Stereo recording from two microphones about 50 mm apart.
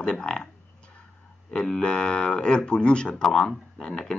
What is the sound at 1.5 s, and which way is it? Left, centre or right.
Speech, centre.